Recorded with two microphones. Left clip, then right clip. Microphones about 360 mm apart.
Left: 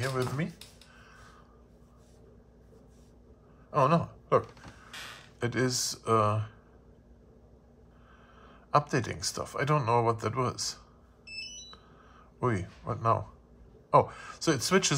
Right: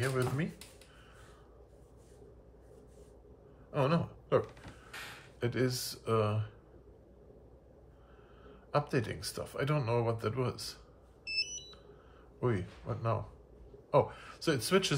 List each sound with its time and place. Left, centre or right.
0.0 s speech: centre
3.7 s a sound: centre
5.4 s speech: left
8.6 s speech: centre
12.4 s speech: left